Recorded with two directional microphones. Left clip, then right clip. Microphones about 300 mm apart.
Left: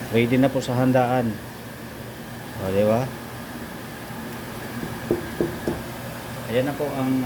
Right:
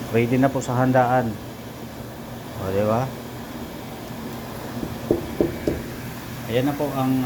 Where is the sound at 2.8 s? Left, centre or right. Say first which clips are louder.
Left 2 dB; centre.